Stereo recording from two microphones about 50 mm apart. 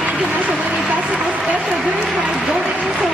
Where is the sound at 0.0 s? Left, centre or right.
Right.